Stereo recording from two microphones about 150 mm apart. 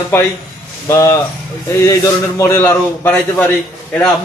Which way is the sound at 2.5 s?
15° left (ahead or behind).